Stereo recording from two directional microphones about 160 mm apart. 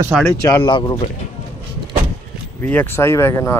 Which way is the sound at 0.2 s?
15° left (ahead or behind).